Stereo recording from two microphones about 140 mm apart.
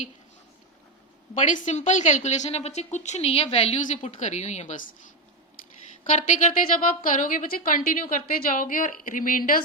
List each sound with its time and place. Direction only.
1.4 s a woman's voice: 60° left (ahead or behind); by 3.8 s 45° left (ahead or behind)
3.8 s a woman's voice: 60° left (ahead or behind)
6.1 s a woman's voice: 60° left (ahead or behind); by 9.6 s 80° left